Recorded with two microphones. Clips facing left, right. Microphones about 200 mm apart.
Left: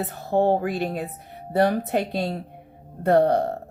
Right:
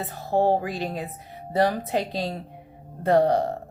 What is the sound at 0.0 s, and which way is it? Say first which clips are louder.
Speech: left 1 dB; 60° left (ahead or behind).